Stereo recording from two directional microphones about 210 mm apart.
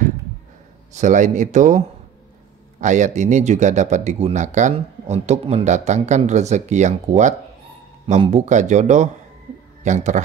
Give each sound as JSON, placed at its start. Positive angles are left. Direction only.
{"t": 0.9, "sound": "speech", "side_deg": -35}